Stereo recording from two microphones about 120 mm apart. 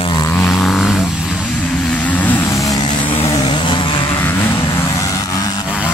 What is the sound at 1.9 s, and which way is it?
Vehicle, 15° left (ahead or behind).